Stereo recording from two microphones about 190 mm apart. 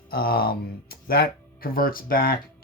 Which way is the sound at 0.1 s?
50° left (ahead or behind).